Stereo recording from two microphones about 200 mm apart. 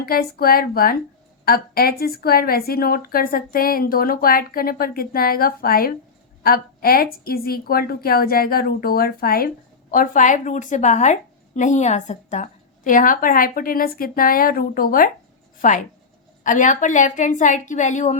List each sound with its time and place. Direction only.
0.0 s a woman's voice: 50° left (ahead or behind)